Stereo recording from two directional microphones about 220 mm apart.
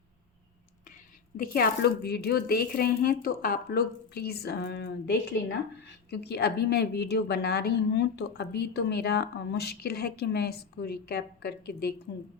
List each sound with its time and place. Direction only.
1.4 s a woman's voice: 45° left (ahead or behind)